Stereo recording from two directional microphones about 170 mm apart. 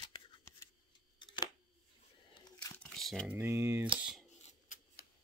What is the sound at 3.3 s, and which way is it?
Speech, 15° right (ahead or behind).